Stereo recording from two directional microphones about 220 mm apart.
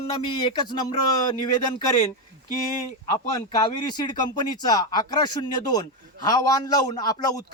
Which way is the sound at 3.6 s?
20° left (ahead or behind).